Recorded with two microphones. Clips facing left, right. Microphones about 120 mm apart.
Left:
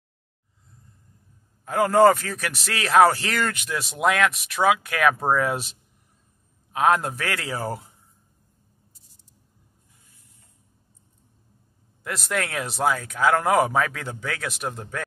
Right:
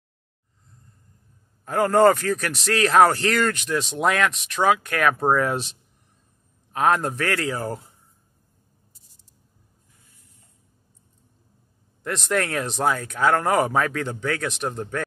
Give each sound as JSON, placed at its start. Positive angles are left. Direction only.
{"t": 1.6, "sound": "a man's voice", "side_deg": 5}
{"t": 12.0, "sound": "speech", "side_deg": 5}